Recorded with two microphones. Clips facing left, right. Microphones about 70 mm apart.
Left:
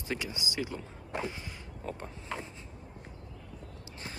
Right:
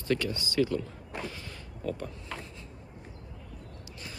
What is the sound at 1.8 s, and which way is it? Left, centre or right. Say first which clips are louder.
Speech: right 5 dB; left.